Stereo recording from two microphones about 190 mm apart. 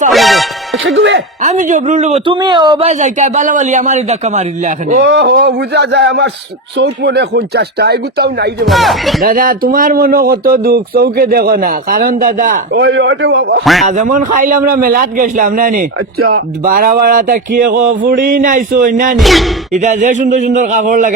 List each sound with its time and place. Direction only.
0.1 s music: centre (ahead or behind)
0.9 s speech: 70° right (ahead or behind)
1.4 s speech: 40° right (ahead or behind)
5.0 s speech: 60° right (ahead or behind)
8.6 s speech: centre (ahead or behind)
9.2 s a man's voice: 50° right (ahead or behind)
12.7 s speech: 70° right (ahead or behind)
13.8 s a man's voice: 40° right (ahead or behind)
19.1 s speech: centre (ahead or behind)
19.7 s speech: 40° right (ahead or behind)